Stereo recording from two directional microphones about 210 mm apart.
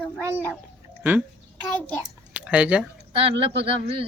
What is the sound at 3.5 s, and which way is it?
Speech, 30° right (ahead or behind).